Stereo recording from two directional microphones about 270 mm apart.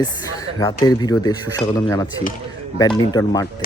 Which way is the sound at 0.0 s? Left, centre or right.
Centre.